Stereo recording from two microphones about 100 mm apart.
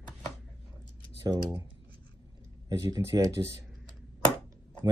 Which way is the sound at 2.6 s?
35° right (ahead or behind).